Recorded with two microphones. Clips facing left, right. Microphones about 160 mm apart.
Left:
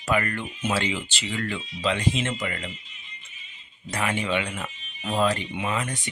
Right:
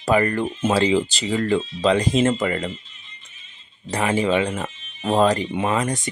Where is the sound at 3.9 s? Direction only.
30° right (ahead or behind).